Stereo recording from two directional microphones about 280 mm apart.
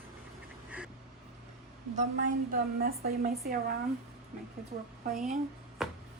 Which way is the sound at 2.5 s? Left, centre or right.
Right.